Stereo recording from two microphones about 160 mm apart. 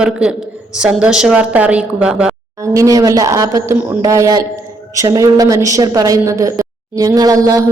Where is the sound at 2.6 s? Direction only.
20° right (ahead or behind).